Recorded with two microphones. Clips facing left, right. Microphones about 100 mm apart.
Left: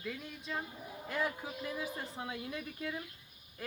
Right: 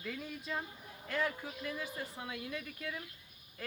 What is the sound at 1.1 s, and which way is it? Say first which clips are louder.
Speech: even; 15° left (ahead or behind).